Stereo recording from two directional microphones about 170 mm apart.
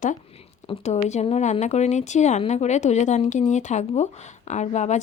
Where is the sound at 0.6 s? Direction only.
40° left (ahead or behind).